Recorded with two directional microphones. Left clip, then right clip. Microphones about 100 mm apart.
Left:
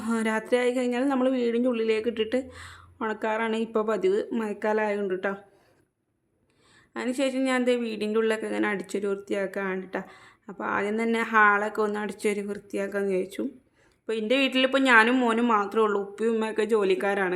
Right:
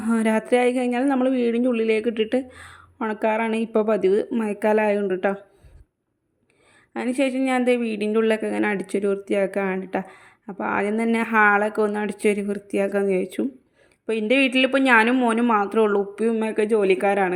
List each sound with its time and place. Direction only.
0.0 s speech: 45° right (ahead or behind)
6.9 s speech: 45° right (ahead or behind)